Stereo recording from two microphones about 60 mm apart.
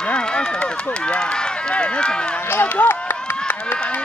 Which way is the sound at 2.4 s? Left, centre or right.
Left.